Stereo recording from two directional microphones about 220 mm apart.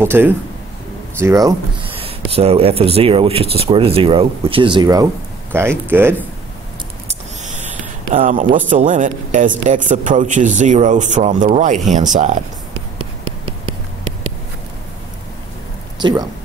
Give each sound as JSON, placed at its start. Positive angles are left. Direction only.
{"t": 0.0, "sound": "speech", "side_deg": -10}
{"t": 8.1, "sound": "speech", "side_deg": -35}
{"t": 13.2, "sound": "a sound", "side_deg": -25}
{"t": 16.0, "sound": "speech", "side_deg": -20}